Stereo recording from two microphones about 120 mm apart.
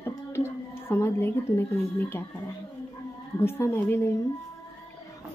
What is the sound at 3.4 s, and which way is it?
Speech, 20° left (ahead or behind).